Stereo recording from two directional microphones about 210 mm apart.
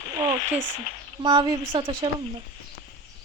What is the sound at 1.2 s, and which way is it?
Speech, 20° right (ahead or behind).